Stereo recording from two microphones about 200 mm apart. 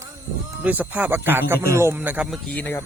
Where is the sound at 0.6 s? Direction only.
10° right (ahead or behind).